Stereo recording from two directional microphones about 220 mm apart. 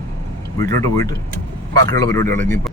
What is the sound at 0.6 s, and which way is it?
Speech, 15° left (ahead or behind).